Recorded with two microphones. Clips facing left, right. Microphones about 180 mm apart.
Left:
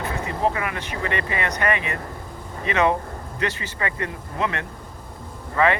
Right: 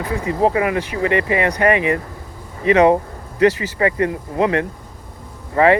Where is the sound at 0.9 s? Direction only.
30° left (ahead or behind).